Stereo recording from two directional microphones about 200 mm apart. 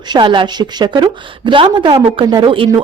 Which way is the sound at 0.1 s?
25° right (ahead or behind).